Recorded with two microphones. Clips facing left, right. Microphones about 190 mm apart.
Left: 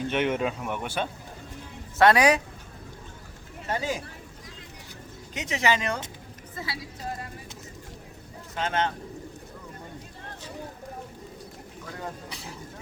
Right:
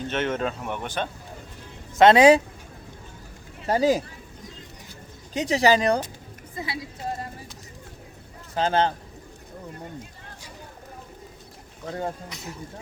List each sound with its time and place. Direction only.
0.1 s speech: 10° left (ahead or behind)
2.0 s speech: 25° right (ahead or behind)
3.7 s speech: 35° right (ahead or behind)
5.3 s speech: 35° right (ahead or behind)
6.6 s a woman's voice: 20° right (ahead or behind)
8.5 s speech: 35° right (ahead or behind)
11.9 s speech: 30° right (ahead or behind)
12.3 s speech: 30° left (ahead or behind)